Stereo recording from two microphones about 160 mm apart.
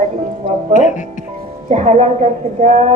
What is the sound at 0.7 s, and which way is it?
Speech, 50° left (ahead or behind).